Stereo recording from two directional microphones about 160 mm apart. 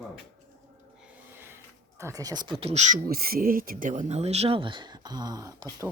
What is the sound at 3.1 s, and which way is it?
Speech, 70° right (ahead or behind).